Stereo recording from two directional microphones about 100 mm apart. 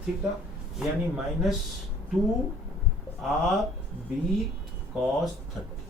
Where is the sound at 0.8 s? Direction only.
5° right (ahead or behind).